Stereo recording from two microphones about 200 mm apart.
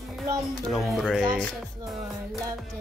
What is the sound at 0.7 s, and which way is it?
Speech, centre (ahead or behind).